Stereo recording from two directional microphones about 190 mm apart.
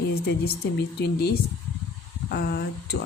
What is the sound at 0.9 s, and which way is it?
Speech, 60° left (ahead or behind).